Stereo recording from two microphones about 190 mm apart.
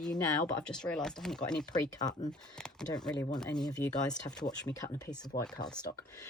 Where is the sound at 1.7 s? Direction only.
20° left (ahead or behind).